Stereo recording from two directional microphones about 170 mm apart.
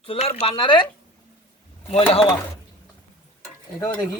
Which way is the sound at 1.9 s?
35° left (ahead or behind).